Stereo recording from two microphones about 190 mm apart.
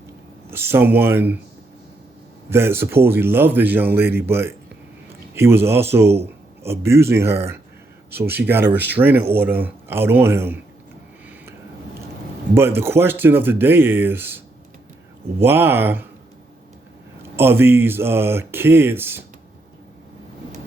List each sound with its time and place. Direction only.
0.5 s speech: 10° right (ahead or behind)
2.5 s speech: 10° right (ahead or behind)
12.5 s speech: 10° right (ahead or behind)
17.3 s speech: 15° right (ahead or behind)